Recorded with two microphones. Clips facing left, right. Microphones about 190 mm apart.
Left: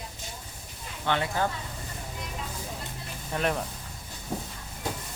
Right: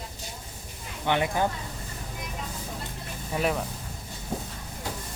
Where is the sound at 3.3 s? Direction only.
5° right (ahead or behind).